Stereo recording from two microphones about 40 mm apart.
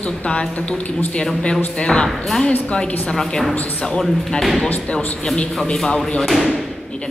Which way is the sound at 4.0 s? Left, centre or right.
Centre.